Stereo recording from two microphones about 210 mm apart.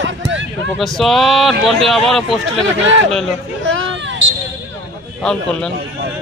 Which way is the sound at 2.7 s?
65° right (ahead or behind).